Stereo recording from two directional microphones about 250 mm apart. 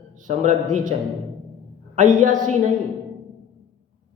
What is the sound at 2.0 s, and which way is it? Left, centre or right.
Speech, right.